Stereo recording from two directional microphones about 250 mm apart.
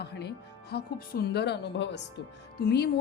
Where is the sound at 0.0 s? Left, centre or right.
Left.